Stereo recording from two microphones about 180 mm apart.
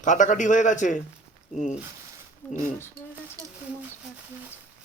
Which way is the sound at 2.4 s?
10° left (ahead or behind).